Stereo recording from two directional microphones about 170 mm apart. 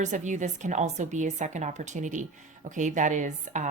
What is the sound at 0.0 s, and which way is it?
A woman's voice, 45° right (ahead or behind).